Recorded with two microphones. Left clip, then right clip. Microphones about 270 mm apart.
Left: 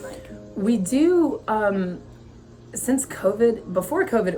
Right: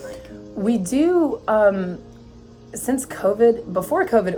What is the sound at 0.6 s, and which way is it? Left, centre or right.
A woman's voice, centre.